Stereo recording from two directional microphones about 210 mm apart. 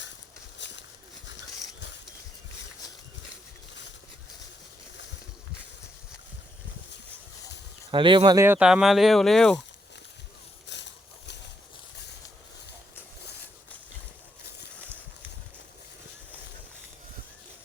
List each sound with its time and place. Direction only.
0.6 s horse: 60° left (ahead or behind)
7.9 s speech: 25° right (ahead or behind); by 9.6 s centre (ahead or behind)
10.7 s a sound: 55° left (ahead or behind)